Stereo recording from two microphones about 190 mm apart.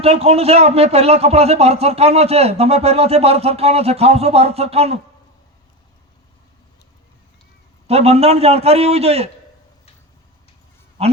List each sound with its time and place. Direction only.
0.0 s a man's voice: 30° right (ahead or behind)
7.9 s a man's voice: 35° right (ahead or behind)
11.0 s speech: 35° right (ahead or behind)